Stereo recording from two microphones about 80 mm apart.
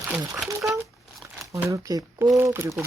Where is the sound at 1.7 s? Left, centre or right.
Right.